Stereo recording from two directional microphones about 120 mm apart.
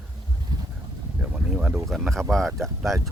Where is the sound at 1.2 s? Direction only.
10° right (ahead or behind).